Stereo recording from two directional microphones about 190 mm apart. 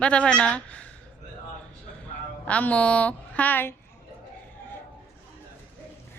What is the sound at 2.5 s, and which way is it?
A woman's voice, 5° left (ahead or behind).